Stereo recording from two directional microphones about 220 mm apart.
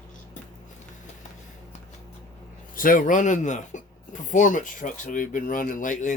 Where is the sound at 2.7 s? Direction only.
40° left (ahead or behind).